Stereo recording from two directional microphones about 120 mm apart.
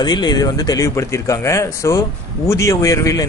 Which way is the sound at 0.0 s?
35° left (ahead or behind).